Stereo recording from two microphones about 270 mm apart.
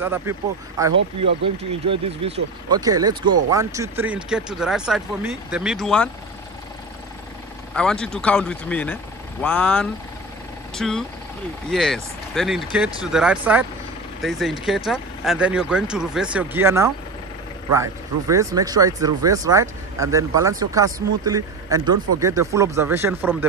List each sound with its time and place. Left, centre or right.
0.0 s speech: centre
1.2 s speech: right
1.9 s speech: right; by 6.0 s centre
7.7 s speech: centre